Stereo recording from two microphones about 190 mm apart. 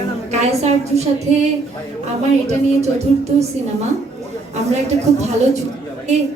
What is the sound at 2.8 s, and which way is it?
Speech, 35° right (ahead or behind).